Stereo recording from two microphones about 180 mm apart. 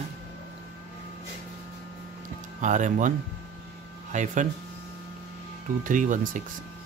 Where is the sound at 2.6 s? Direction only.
45° right (ahead or behind).